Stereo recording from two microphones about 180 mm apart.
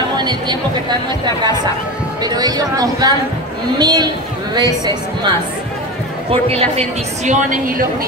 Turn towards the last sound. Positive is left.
turn(degrees=-50)  # may be behind; listen again after turning